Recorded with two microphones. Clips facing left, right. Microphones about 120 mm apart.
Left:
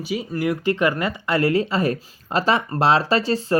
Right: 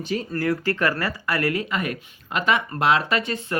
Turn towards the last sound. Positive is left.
turn(degrees=30)  # may be behind; listen again after turning